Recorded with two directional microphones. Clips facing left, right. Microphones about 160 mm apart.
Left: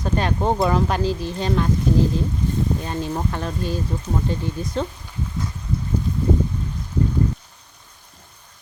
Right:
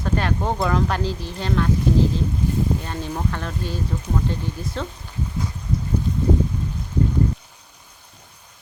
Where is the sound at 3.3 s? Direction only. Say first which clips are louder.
Left 2 dB; 15° left (ahead or behind).